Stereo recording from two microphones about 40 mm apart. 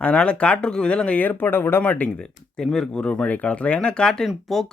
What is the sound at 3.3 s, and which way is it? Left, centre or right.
Speech, left.